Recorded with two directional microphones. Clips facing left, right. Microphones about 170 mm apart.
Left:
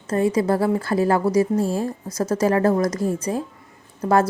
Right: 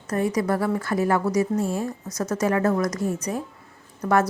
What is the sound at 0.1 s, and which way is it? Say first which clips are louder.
A woman's voice: left 4 dB; 25° left (ahead or behind).